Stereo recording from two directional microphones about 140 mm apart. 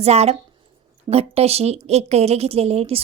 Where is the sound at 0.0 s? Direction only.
50° right (ahead or behind).